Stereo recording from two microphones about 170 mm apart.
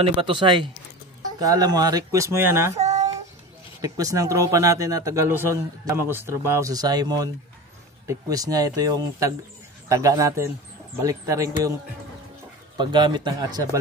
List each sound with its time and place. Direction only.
0.0 s a man's voice: 30° right (ahead or behind); by 2.8 s 15° right (ahead or behind)
3.8 s a man's voice: 20° right (ahead or behind)
12.7 s a man's voice: 25° right (ahead or behind)